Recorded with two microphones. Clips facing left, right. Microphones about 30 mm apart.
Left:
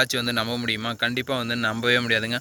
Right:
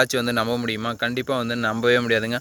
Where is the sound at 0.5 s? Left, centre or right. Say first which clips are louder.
Right 2 dB; left.